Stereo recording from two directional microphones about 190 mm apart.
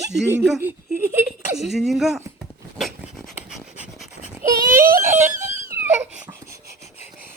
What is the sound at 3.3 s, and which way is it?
Pant, 5° right (ahead or behind).